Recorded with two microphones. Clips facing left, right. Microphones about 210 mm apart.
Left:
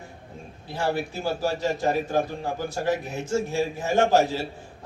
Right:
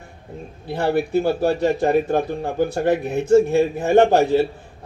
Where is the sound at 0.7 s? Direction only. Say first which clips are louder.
Right 8 dB; 60° right (ahead or behind).